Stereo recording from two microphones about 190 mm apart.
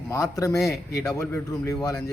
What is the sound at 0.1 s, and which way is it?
Speech, 15° left (ahead or behind).